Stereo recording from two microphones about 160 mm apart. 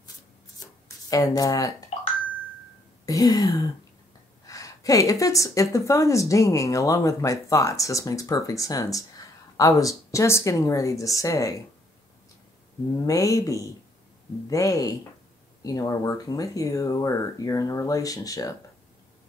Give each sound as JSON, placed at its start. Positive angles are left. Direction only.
{"t": 1.1, "sound": "speech", "side_deg": 20}
{"t": 1.9, "sound": "marimba", "side_deg": 40}
{"t": 3.1, "sound": "speech", "side_deg": 20}
{"t": 12.9, "sound": "speech", "side_deg": 20}